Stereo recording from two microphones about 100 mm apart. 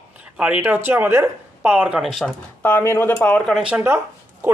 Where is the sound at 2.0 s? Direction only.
Centre (ahead or behind).